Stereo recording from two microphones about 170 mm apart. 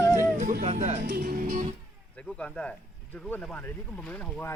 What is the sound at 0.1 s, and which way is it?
Music, 50° right (ahead or behind).